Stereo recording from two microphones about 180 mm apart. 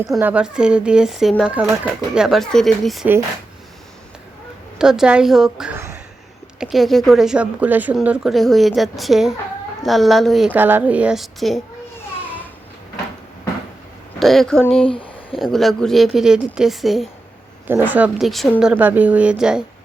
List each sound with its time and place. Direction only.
0.2 s speech: 10° right (ahead or behind)
4.8 s speech: 5° right (ahead or behind)
14.2 s speech: centre (ahead or behind)
14.8 s a sound: 30° left (ahead or behind)
15.5 s speech: centre (ahead or behind)
17.7 s speech: 10° right (ahead or behind)
18.7 s speech: 10° right (ahead or behind)